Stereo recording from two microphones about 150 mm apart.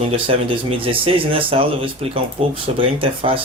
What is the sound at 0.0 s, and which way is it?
Speech, 35° right (ahead or behind).